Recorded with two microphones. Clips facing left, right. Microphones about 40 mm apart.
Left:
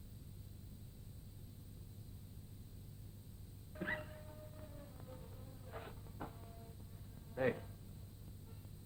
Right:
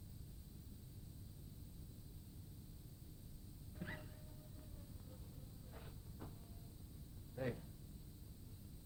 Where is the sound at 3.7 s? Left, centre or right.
Left.